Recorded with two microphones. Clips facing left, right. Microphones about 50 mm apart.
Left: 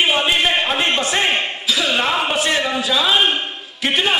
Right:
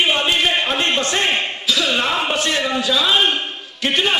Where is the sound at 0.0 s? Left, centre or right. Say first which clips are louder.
Left 1 dB; centre.